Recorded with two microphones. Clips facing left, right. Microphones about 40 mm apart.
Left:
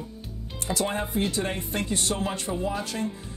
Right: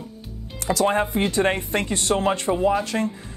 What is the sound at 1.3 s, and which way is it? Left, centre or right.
Speech, right.